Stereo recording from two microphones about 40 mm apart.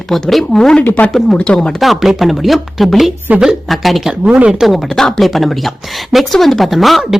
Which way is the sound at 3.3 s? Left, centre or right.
Right.